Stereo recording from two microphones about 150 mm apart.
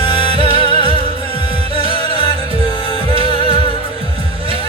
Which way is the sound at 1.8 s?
40° right (ahead or behind).